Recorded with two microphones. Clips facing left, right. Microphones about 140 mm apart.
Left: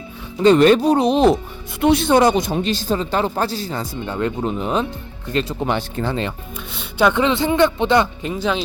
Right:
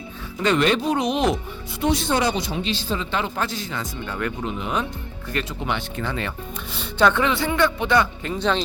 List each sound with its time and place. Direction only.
0.4 s speech: 40° left (ahead or behind)
1.8 s speech: 60° left (ahead or behind); by 4.4 s 25° left (ahead or behind)
4.4 s speech: 40° left (ahead or behind)
7.0 s speech: 15° left (ahead or behind)
8.3 s speech: 5° left (ahead or behind)